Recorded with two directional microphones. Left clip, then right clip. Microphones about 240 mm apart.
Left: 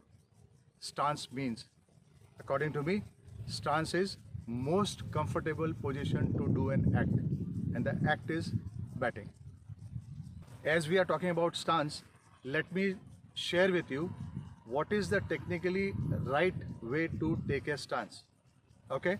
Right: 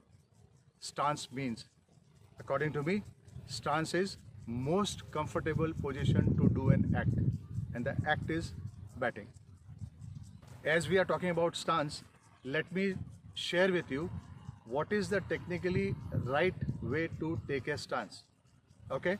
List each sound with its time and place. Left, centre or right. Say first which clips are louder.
0.8 s speech: even; centre
10.6 s speech: even; centre